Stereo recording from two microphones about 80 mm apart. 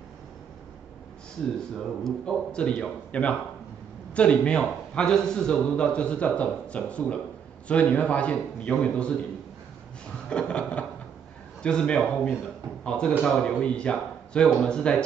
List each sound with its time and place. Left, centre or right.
1.6 s a man's voice: centre
10.3 s a man's voice: centre